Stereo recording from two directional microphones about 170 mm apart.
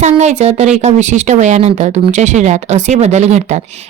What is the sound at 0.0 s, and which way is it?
Speech, 40° right (ahead or behind).